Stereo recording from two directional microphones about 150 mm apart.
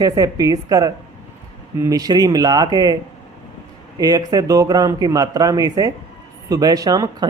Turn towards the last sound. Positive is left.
turn(degrees=-25)  # may be behind; listen again after turning